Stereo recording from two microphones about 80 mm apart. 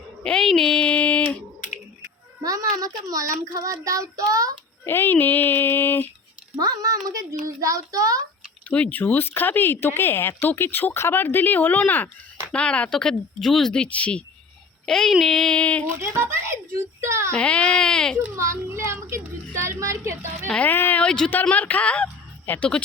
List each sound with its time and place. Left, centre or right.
0.2 s a sound: centre
2.4 s a child's voice: right
4.9 s speech: left
6.6 s a child's voice: right
8.7 s speech: centre
15.9 s a child's voice: right
17.3 s speech: centre
18.3 s a child's voice: right
20.5 s speech: centre
21.0 s a woman's voice: centre